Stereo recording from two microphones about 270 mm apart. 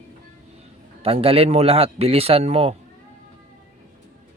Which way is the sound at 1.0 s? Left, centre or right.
Right.